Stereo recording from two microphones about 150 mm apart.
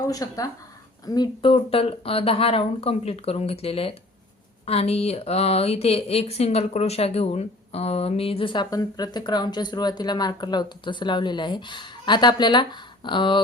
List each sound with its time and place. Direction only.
0.1 s speech: 25° left (ahead or behind)